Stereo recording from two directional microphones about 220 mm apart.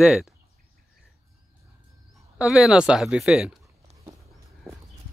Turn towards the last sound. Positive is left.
turn(degrees=-15)  # may be behind; listen again after turning